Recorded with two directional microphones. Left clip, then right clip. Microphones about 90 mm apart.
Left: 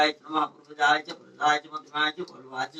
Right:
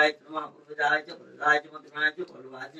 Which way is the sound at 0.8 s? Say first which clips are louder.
Left 3 dB; 45° left (ahead or behind).